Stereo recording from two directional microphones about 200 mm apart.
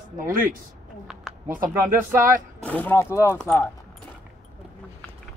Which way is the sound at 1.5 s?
45° right (ahead or behind).